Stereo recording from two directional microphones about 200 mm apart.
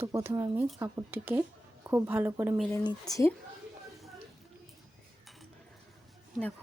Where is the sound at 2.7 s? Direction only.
10° left (ahead or behind).